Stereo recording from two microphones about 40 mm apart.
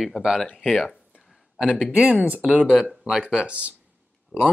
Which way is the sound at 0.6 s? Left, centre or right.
Centre.